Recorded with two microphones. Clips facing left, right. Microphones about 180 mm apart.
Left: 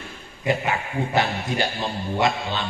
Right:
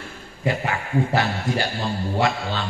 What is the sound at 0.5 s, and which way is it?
Speech, 20° left (ahead or behind).